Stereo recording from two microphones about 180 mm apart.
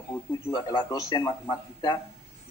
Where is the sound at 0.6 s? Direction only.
25° left (ahead or behind).